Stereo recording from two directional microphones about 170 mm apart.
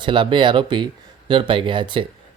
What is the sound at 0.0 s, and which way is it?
Speech, 30° right (ahead or behind).